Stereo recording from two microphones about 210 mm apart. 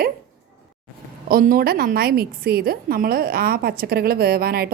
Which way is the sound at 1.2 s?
45° right (ahead or behind).